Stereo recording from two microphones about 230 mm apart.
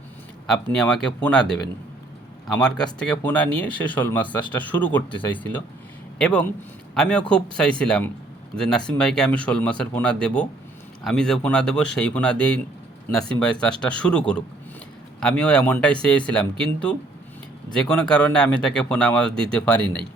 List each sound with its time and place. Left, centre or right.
0.4 s speech: centre
2.6 s speech: centre
17.8 s speech: centre